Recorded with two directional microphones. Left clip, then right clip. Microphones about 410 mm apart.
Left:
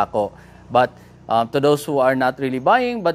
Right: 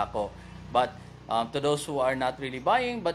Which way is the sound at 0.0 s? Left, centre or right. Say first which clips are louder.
Left 10 dB; left.